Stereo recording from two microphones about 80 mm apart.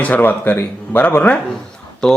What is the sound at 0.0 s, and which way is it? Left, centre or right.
Speech, centre.